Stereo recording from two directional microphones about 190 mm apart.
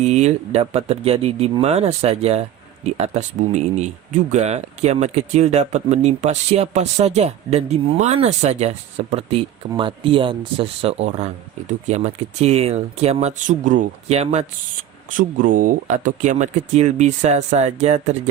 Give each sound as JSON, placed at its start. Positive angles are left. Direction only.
{"t": 0.0, "sound": "speech", "side_deg": -35}